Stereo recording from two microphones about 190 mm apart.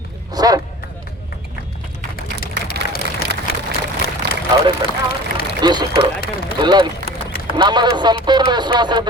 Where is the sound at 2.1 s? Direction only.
50° left (ahead or behind).